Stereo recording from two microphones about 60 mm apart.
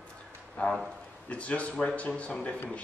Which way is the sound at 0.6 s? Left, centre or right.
Left.